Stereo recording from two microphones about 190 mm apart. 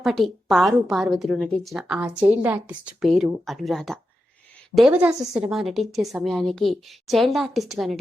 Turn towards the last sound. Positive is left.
turn(degrees=0)  # may be behind; listen again after turning